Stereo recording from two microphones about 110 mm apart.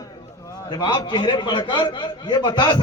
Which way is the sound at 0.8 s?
45° left (ahead or behind).